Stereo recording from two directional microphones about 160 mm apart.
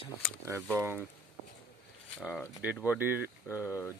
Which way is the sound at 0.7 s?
15° right (ahead or behind).